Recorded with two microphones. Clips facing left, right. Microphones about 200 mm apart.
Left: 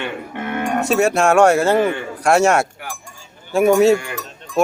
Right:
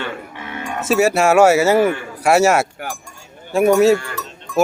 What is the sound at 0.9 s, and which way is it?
Speech, 5° right (ahead or behind).